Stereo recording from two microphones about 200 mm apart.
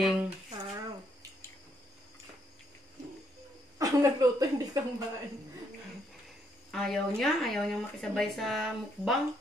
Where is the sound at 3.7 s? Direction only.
15° right (ahead or behind).